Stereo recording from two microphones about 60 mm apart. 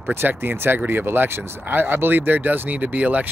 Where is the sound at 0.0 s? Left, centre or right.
Right.